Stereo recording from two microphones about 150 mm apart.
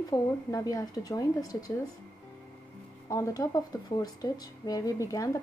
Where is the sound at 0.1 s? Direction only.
25° left (ahead or behind).